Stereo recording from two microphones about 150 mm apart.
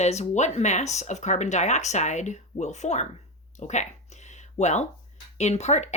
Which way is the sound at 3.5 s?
50° left (ahead or behind).